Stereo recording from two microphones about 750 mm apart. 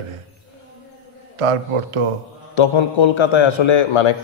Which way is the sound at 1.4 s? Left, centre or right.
Right.